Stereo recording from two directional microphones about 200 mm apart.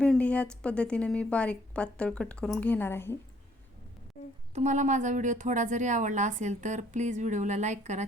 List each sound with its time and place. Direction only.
0.0 s a woman's voice: 5° left (ahead or behind)
4.5 s a woman's voice: 35° right (ahead or behind)